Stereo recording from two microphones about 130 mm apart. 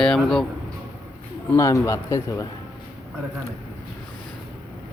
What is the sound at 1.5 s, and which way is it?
Speech, 25° left (ahead or behind).